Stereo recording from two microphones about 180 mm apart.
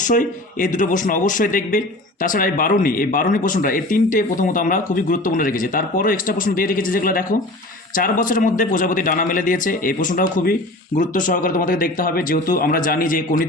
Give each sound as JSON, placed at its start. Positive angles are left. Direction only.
{"t": 0.0, "sound": "speech", "side_deg": 50}